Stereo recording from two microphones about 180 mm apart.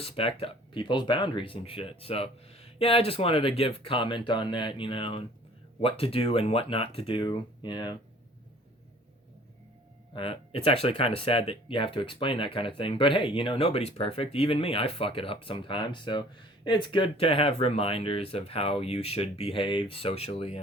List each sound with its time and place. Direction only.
0.0 s speech: 30° left (ahead or behind)
10.2 s speech: 30° left (ahead or behind)